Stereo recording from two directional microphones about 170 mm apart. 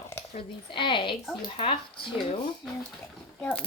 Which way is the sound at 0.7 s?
30° left (ahead or behind).